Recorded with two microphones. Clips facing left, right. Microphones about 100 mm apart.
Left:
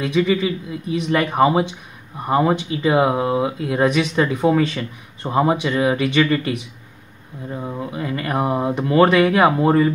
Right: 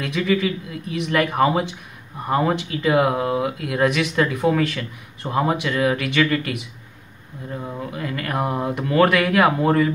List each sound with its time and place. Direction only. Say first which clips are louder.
0.0 s speech: left 3 dB; 15° left (ahead or behind)
7.5 s speech: left 2 dB; 15° left (ahead or behind)